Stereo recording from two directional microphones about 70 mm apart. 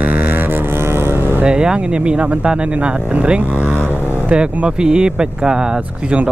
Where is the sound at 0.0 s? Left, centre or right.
Right.